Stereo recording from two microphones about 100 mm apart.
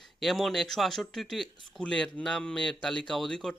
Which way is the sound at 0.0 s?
Centre (ahead or behind).